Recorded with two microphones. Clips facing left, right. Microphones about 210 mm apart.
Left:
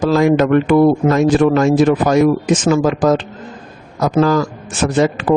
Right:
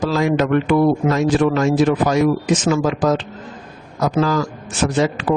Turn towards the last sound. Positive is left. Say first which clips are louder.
# left 3 dB
turn(degrees=50)  # may be behind; listen again after turning